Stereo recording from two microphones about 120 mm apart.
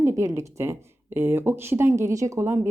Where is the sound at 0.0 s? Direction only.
25° right (ahead or behind).